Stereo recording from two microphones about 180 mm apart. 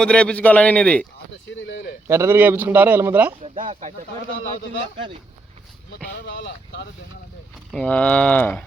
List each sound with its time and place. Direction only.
0.0 s a man's voice: 5° left (ahead or behind)
1.6 s a sound: 70° left (ahead or behind)
2.0 s a man's voice: 15° right (ahead or behind)
3.6 s speech: 40° right (ahead or behind)
6.1 s speech: 85° left
7.7 s a man's voice: 5° left (ahead or behind)